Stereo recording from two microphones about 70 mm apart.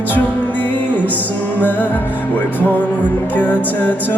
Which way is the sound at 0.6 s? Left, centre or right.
Left.